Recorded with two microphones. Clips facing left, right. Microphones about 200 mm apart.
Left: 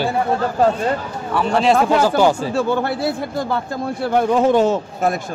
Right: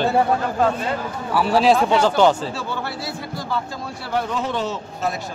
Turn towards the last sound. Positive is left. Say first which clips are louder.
# left 7 dB
turn(degrees=50)  # may be behind; listen again after turning